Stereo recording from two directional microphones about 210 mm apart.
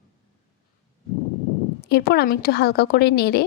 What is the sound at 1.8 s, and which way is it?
Speech, 50° left (ahead or behind).